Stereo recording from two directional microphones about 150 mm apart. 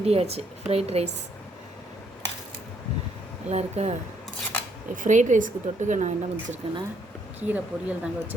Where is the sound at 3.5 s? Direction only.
45° right (ahead or behind).